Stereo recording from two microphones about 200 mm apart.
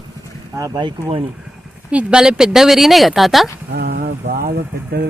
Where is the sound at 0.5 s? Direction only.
15° right (ahead or behind).